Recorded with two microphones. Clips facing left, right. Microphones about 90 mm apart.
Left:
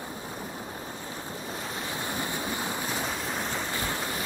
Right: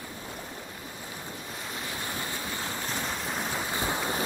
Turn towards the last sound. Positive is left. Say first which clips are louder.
# right 2 dB
turn(degrees=-25)  # may be behind; listen again after turning